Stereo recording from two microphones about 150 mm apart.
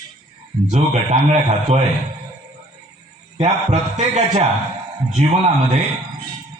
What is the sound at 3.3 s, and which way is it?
A man's voice, 50° right (ahead or behind).